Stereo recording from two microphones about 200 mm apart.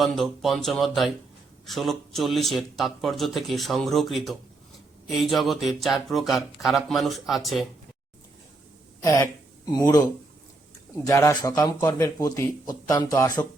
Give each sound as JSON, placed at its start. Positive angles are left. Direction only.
{"t": 0.0, "sound": "speech", "side_deg": 0}
{"t": 9.8, "sound": "a man's voice", "side_deg": 20}